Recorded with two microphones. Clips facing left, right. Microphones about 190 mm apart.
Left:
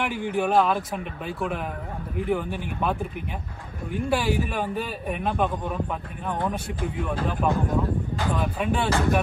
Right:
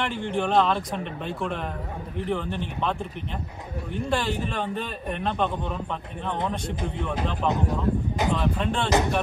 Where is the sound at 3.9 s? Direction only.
10° left (ahead or behind).